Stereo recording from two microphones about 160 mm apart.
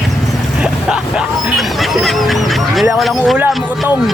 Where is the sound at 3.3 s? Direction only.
10° right (ahead or behind).